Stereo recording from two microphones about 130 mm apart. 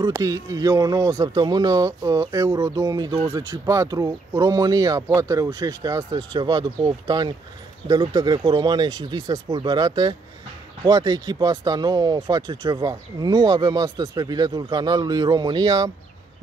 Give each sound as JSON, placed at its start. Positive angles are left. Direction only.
{"t": 0.1, "sound": "speech", "side_deg": -25}